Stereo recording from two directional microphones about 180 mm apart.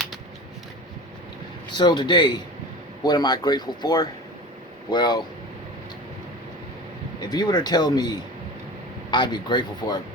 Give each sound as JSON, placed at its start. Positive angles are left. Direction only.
{"t": 1.7, "sound": "speech", "side_deg": 25}
{"t": 7.3, "sound": "speech", "side_deg": 25}